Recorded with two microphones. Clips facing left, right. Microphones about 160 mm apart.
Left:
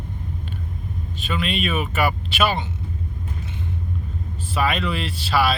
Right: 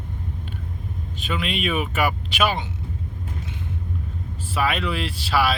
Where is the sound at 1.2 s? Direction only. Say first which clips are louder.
Left 2 dB; 15° right (ahead or behind).